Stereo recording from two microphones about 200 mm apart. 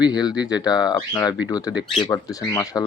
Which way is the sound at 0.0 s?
20° left (ahead or behind).